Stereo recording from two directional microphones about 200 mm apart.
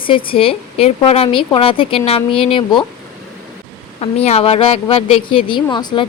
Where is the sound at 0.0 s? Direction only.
25° left (ahead or behind).